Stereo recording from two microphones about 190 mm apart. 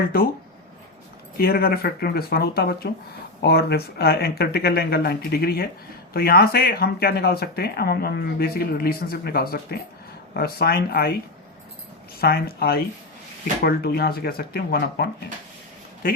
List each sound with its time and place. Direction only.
0.1 s speech: 50° left (ahead or behind)
1.4 s speech: 55° left (ahead or behind)
12.2 s a man's voice: 55° left (ahead or behind)